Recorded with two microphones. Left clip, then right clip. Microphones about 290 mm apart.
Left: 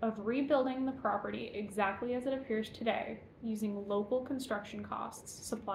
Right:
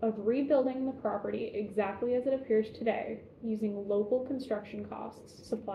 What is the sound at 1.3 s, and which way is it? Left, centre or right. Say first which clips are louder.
Speech: right 5 dB; centre.